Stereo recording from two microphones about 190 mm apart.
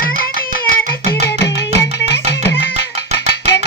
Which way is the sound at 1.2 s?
65° left (ahead or behind).